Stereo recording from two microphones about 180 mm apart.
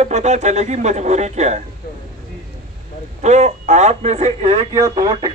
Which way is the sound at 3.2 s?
40° right (ahead or behind).